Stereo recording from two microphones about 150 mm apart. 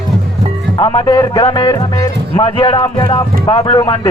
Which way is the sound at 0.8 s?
30° left (ahead or behind).